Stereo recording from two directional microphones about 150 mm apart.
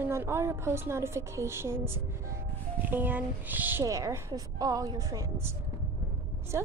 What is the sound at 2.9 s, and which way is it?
A woman's voice, 10° right (ahead or behind).